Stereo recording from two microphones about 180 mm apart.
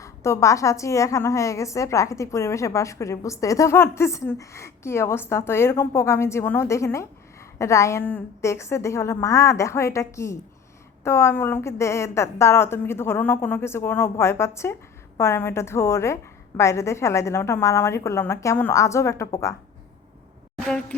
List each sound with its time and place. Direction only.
0.0 s a woman's voice: 15° left (ahead or behind)